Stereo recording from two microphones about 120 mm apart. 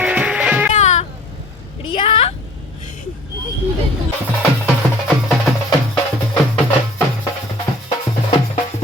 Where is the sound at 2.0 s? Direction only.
55° left (ahead or behind).